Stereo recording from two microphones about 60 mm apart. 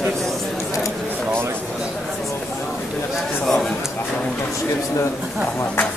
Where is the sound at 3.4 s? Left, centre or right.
Centre.